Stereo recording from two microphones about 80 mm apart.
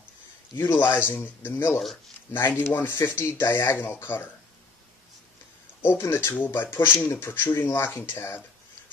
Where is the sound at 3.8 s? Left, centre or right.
Left.